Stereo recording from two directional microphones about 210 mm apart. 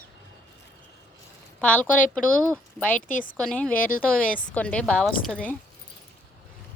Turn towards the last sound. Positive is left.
turn(degrees=5)  # may be behind; listen again after turning